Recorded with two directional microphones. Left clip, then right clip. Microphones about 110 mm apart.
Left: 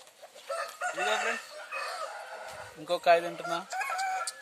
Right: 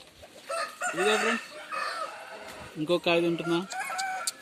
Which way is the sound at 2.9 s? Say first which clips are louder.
Left 1 dB; 45° left (ahead or behind).